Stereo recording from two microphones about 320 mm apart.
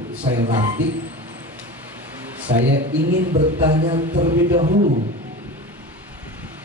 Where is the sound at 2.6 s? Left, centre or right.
Right.